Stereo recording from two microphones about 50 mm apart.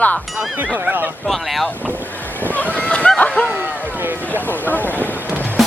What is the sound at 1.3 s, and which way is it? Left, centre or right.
Music, centre.